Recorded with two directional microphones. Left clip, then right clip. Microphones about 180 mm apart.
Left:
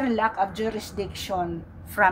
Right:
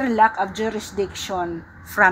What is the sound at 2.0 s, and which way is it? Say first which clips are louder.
Speech: right 4 dB; 20° right (ahead or behind).